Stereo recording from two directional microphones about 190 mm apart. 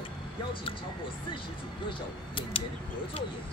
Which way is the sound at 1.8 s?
25° left (ahead or behind).